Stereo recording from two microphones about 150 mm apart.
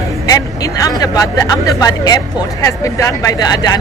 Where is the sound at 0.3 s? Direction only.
25° left (ahead or behind).